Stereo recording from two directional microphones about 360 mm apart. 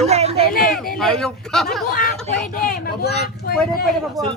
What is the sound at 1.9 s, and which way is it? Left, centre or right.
Speech, left.